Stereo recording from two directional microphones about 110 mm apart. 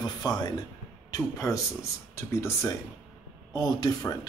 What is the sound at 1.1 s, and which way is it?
Speech, 30° left (ahead or behind).